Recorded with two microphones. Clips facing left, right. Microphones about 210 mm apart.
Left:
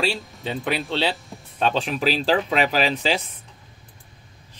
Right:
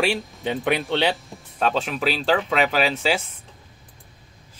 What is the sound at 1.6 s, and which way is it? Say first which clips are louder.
Speech: even; centre (ahead or behind).